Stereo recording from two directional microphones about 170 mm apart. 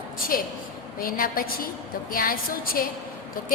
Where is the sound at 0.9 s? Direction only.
55° left (ahead or behind).